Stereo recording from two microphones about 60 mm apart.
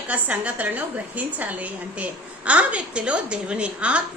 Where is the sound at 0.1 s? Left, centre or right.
Right.